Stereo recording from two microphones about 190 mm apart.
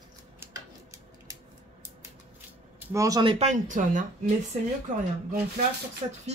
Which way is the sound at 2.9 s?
20° right (ahead or behind).